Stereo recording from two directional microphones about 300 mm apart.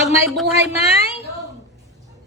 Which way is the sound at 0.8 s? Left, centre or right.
Centre.